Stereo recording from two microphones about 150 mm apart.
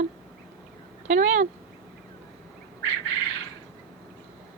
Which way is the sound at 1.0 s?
50° right (ahead or behind).